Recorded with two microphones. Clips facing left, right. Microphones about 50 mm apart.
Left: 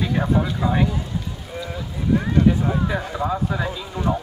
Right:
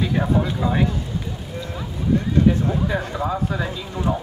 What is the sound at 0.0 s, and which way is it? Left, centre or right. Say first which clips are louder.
Speech: even; centre.